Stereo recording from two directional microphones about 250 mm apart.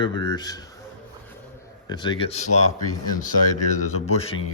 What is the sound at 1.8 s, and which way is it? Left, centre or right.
Speech, centre.